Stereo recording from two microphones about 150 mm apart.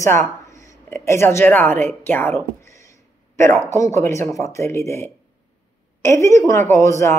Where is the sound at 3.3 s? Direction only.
15° left (ahead or behind).